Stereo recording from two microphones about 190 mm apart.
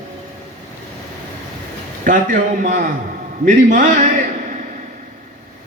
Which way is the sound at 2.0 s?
45° right (ahead or behind).